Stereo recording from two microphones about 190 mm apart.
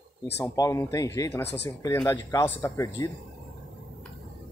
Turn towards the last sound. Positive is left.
turn(degrees=15)  # may be behind; listen again after turning